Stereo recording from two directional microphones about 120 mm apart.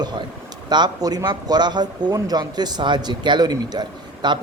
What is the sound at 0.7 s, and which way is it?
A man's voice, 35° right (ahead or behind).